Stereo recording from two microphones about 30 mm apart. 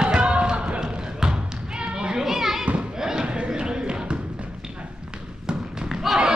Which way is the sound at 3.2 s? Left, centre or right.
Right.